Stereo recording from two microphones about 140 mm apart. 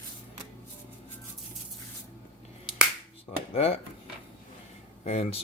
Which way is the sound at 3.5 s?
45° left (ahead or behind).